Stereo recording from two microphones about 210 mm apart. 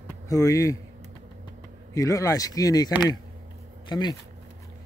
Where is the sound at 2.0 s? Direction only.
15° left (ahead or behind).